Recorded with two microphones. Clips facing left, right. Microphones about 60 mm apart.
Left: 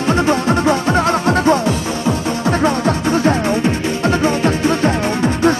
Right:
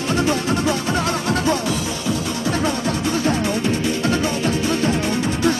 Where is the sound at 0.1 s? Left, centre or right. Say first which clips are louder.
Left 5 dB; left.